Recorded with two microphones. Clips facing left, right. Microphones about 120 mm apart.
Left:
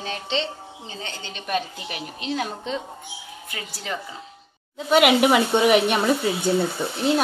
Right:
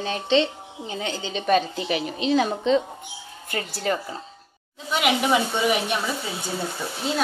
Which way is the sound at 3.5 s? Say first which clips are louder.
Right 8 dB; 45° right (ahead or behind).